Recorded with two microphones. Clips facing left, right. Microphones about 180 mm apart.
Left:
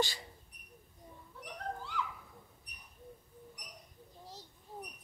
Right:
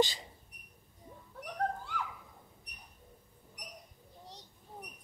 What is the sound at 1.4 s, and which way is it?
Dog, 50° right (ahead or behind).